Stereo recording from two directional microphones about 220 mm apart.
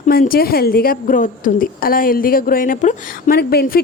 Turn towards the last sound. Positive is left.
turn(degrees=45)  # may be behind; listen again after turning